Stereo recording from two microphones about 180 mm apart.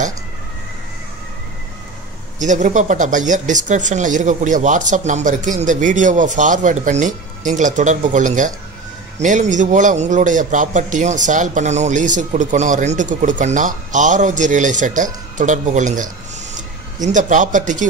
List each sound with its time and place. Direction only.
2.3 s speech: 45° right (ahead or behind)